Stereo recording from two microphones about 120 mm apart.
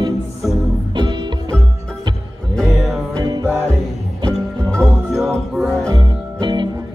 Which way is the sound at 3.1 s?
35° right (ahead or behind).